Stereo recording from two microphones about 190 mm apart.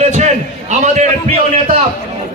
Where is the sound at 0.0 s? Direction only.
40° right (ahead or behind).